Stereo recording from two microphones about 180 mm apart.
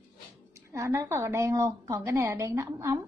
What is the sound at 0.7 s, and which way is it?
A woman's voice, 15° right (ahead or behind).